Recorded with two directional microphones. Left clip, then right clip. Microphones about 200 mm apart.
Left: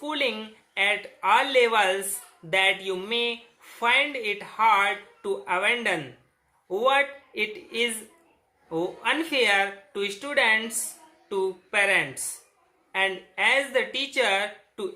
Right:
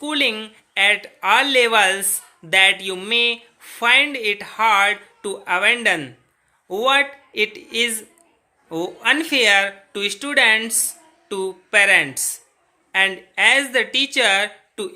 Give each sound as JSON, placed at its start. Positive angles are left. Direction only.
{"t": 0.0, "sound": "speech", "side_deg": -45}